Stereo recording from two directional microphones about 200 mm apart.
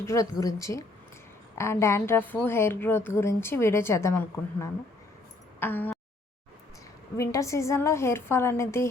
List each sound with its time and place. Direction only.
0.0 s a woman's voice: 15° left (ahead or behind)
5.5 s a sound: 10° left (ahead or behind)
7.2 s a woman's voice: 15° left (ahead or behind)